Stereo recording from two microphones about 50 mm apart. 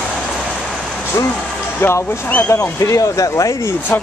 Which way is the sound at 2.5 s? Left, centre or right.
Left.